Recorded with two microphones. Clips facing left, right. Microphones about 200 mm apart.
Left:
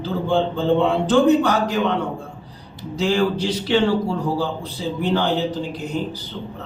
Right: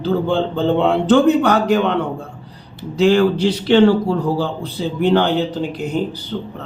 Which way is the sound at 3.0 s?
65° right (ahead or behind).